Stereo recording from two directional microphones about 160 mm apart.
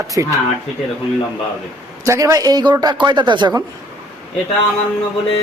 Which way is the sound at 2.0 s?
20° right (ahead or behind).